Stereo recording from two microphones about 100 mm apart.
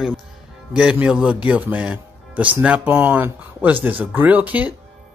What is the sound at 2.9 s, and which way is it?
Speech, 25° right (ahead or behind).